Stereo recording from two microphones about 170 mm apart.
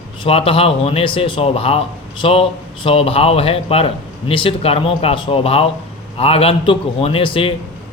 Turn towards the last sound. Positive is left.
turn(degrees=30)  # may be behind; listen again after turning